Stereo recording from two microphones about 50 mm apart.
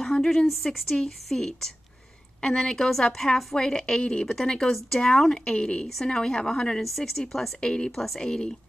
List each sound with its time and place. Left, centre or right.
0.0 s a sound: centre
0.9 s a woman's voice: centre
7.6 s a woman's voice: centre
7.9 s speech: centre
8.2 s a woman's voice: centre